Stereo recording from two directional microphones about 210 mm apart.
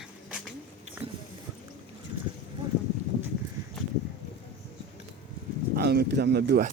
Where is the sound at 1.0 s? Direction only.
30° right (ahead or behind).